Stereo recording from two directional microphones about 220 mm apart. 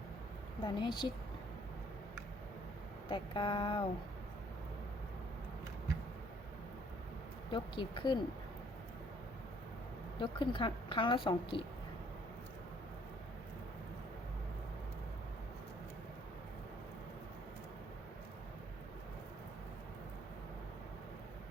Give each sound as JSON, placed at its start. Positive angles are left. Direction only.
{"t": 0.6, "sound": "a woman's voice", "side_deg": 20}
{"t": 3.1, "sound": "a woman's voice", "side_deg": 20}
{"t": 7.5, "sound": "a woman's voice", "side_deg": 20}
{"t": 10.2, "sound": "a woman's voice", "side_deg": 20}